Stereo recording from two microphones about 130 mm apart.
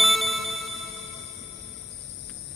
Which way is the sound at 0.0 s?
Centre (ahead or behind).